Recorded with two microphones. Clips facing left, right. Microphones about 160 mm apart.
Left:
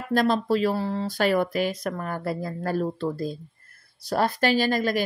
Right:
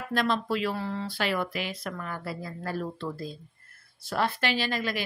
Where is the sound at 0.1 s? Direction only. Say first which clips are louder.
Left 6 dB; 40° left (ahead or behind).